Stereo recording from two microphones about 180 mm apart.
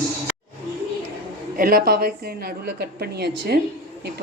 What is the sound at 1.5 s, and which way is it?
A woman's voice, 55° right (ahead or behind).